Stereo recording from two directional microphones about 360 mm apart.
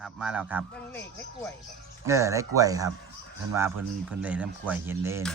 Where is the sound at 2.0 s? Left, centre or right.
Centre.